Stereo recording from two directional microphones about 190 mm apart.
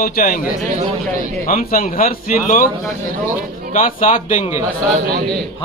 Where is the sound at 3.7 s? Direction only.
45° left (ahead or behind).